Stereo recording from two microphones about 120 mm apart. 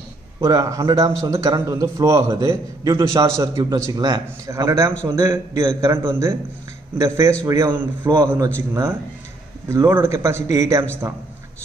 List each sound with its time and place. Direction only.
0.4 s a man's voice: 30° right (ahead or behind)
9.7 s a man's voice: 20° right (ahead or behind)